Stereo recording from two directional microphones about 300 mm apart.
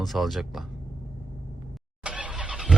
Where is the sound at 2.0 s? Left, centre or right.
Centre.